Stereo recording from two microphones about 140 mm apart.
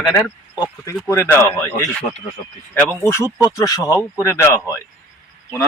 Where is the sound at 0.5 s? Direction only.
30° left (ahead or behind).